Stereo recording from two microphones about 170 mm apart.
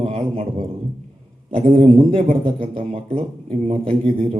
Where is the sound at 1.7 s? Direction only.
35° right (ahead or behind).